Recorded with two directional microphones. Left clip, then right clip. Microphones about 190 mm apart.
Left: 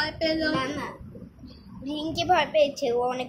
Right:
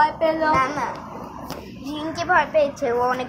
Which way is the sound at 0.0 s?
50° left (ahead or behind).